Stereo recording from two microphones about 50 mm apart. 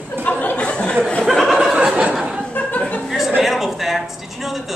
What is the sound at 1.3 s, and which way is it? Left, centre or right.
Chuckle, centre.